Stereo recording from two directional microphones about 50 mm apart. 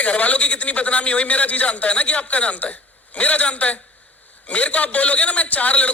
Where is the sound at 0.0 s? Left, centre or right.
Left.